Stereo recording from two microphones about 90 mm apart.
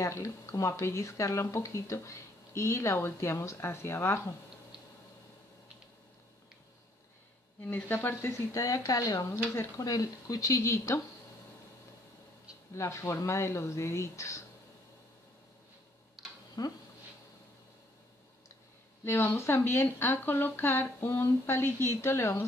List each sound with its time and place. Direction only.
0.0 s speech: 35° left (ahead or behind)
7.6 s speech: 20° left (ahead or behind)
12.7 s speech: 30° left (ahead or behind)
16.2 s tick-tock: 5° right (ahead or behind)
16.6 s speech: 45° left (ahead or behind)
19.0 s a woman's voice: 30° left (ahead or behind)